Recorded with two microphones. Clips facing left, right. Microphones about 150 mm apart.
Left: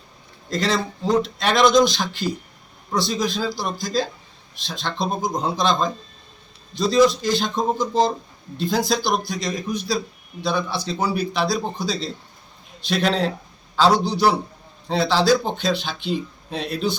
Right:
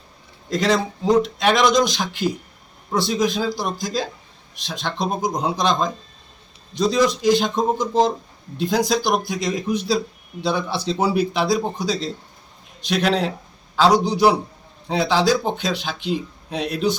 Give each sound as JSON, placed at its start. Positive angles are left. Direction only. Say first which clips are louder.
{"t": 0.5, "sound": "speech", "louder": "right 3 dB", "side_deg": -15}
{"t": 1.9, "sound": "a man's voice", "louder": "right 2 dB", "side_deg": -15}
{"t": 6.7, "sound": "a man's voice", "louder": "left 2 dB", "side_deg": -15}